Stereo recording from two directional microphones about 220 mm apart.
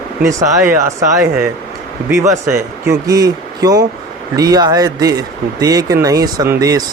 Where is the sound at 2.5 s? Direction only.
15° right (ahead or behind).